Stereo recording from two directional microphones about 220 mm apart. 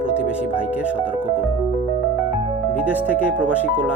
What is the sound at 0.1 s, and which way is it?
Speech, 5° right (ahead or behind).